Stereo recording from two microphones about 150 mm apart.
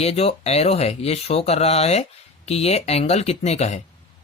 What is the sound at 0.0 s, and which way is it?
Speech, 45° left (ahead or behind).